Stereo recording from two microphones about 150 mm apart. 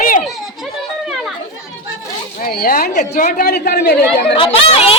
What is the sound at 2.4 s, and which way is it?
A woman's voice, 85° left.